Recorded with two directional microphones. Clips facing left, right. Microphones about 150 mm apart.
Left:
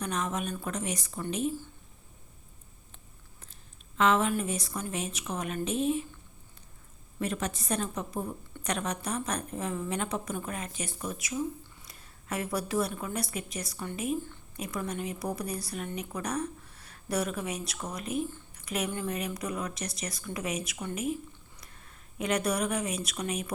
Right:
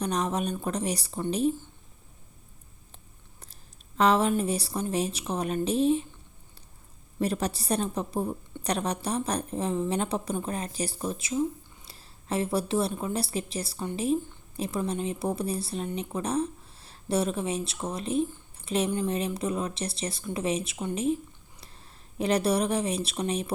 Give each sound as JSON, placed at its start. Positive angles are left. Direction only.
{"t": 0.0, "sound": "a woman's voice", "side_deg": -35}
{"t": 3.4, "sound": "a woman's voice", "side_deg": -35}
{"t": 7.2, "sound": "a woman's voice", "side_deg": -35}
{"t": 18.5, "sound": "a sound", "side_deg": -30}
{"t": 18.9, "sound": "speech", "side_deg": -20}